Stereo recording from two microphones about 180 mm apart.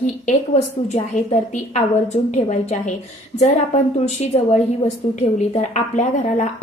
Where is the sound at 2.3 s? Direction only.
40° left (ahead or behind).